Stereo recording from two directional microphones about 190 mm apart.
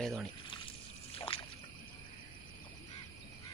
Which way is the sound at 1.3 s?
30° left (ahead or behind).